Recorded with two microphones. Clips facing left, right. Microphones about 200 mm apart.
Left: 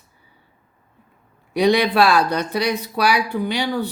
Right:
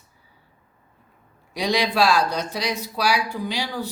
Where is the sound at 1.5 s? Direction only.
60° left (ahead or behind).